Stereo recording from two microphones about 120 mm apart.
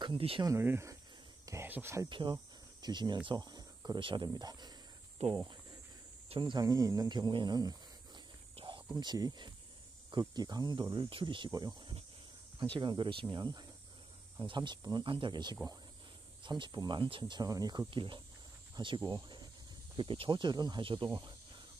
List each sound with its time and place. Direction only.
0.0 s speech: 45° right (ahead or behind)
0.6 s speech: 20° right (ahead or behind)
1.4 s a sound: 25° right (ahead or behind)
1.7 s speech: 20° right (ahead or behind)
2.0 s speech: 45° right (ahead or behind)
2.3 s cricket: 35° right (ahead or behind)
3.3 s speech: 35° right (ahead or behind)
5.2 s speech: 65° right (ahead or behind)
6.2 s speech: 45° right (ahead or behind)
8.5 s a sound: 45° right (ahead or behind)
8.9 s speech: 35° right (ahead or behind)
16.4 s speech: 40° right (ahead or behind)